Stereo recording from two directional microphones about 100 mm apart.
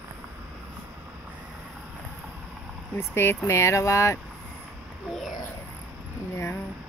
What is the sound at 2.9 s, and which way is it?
Speech, 25° left (ahead or behind).